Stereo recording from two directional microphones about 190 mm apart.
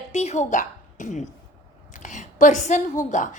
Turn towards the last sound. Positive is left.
turn(degrees=40)  # may be behind; listen again after turning